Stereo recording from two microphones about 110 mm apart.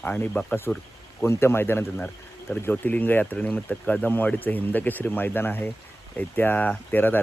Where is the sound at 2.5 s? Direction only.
15° left (ahead or behind).